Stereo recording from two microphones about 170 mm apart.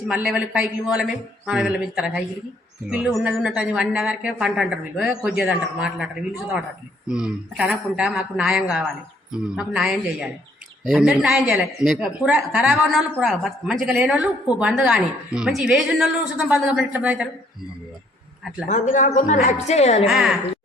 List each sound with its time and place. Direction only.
0.1 s speech: 5° right (ahead or behind)
7.1 s speech: 5° right (ahead or behind)
18.7 s a woman's voice: 45° left (ahead or behind)
20.1 s speech: 5° right (ahead or behind)